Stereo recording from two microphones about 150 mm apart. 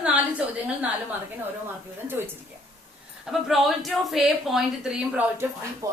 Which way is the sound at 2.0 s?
15° right (ahead or behind).